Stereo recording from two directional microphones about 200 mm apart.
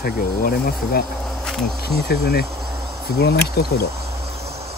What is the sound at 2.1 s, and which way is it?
Speech, 55° left (ahead or behind).